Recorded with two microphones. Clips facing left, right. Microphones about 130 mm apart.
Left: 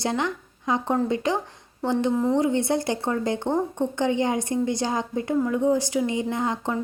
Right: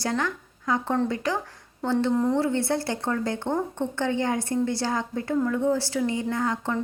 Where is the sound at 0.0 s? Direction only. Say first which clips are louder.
Left 2 dB; 20° left (ahead or behind).